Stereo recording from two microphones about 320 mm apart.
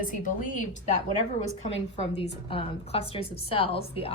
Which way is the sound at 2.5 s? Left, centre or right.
Centre.